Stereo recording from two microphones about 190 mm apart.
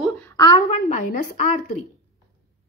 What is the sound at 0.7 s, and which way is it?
Speech, 45° left (ahead or behind).